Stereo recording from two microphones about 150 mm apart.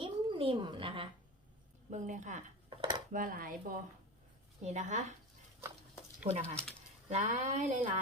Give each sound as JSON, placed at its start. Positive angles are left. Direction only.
{"t": 0.0, "sound": "a sound", "side_deg": -35}
{"t": 1.9, "sound": "a woman's voice", "side_deg": -55}
{"t": 2.6, "sound": "dishes", "side_deg": -30}
{"t": 3.1, "sound": "dishes", "side_deg": -65}
{"t": 4.6, "sound": "speech", "side_deg": -50}
{"t": 6.2, "sound": "speech", "side_deg": -45}